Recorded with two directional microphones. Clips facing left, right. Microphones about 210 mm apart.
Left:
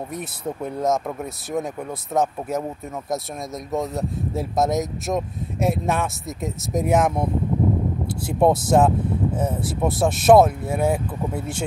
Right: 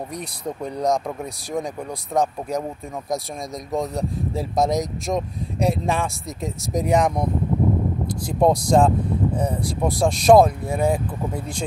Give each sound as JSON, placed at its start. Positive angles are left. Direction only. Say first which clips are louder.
{"t": 0.1, "sound": "speech", "louder": "left 1 dB", "side_deg": 5}
{"t": 3.7, "sound": "speech", "louder": "right 1 dB", "side_deg": 0}
{"t": 8.4, "sound": "speech", "louder": "even", "side_deg": 5}
{"t": 11.3, "sound": "speech", "louder": "left 1 dB", "side_deg": 25}